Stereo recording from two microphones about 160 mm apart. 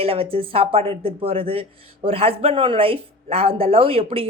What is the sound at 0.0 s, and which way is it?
Speech, 35° right (ahead or behind).